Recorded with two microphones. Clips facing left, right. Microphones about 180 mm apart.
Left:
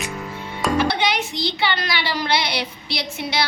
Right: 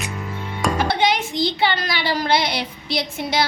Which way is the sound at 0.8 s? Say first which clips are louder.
Right 2 dB; 50° right (ahead or behind).